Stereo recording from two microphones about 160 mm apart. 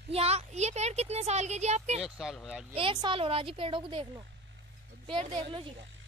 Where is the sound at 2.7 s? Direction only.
30° right (ahead or behind).